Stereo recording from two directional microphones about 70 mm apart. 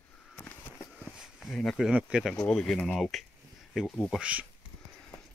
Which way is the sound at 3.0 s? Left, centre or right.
Centre.